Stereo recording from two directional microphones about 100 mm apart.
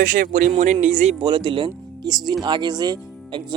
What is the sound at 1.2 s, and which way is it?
Speech, 55° right (ahead or behind).